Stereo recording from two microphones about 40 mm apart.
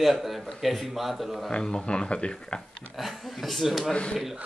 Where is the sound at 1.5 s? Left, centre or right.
Left.